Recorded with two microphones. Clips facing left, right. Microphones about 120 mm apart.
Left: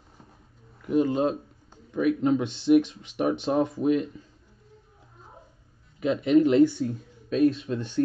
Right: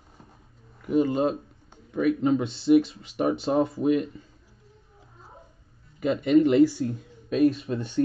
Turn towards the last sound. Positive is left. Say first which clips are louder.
# right 1 dB
turn(degrees=-10)  # may be behind; listen again after turning